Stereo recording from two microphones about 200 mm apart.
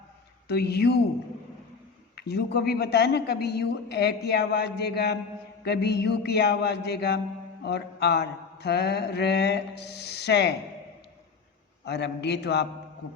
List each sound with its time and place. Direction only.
0.4 s a man's voice: 55° left (ahead or behind)
2.1 s a man's voice: 55° left (ahead or behind)
11.9 s a man's voice: 60° left (ahead or behind)